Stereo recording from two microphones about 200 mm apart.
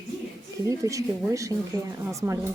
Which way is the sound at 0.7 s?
15° right (ahead or behind).